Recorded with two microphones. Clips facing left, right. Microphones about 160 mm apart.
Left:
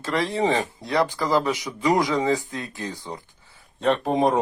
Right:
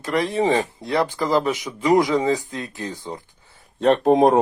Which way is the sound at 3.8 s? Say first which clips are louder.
Right 6 dB; 45° right (ahead or behind).